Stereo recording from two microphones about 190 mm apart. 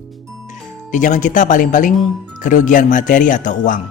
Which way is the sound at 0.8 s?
40° left (ahead or behind).